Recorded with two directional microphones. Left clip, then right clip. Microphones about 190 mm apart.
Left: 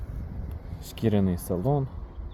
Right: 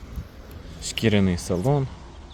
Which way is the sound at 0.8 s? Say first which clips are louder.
Right 5 dB; 5° right (ahead or behind).